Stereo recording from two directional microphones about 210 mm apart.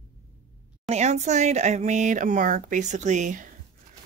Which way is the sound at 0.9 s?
35° right (ahead or behind).